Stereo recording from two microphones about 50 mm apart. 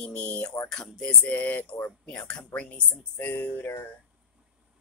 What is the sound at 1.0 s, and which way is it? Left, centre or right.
Speech, left.